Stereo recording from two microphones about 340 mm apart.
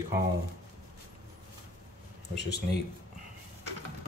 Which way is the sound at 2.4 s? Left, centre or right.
Left.